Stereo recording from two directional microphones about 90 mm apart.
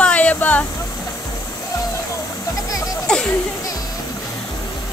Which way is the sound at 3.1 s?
10° left (ahead or behind).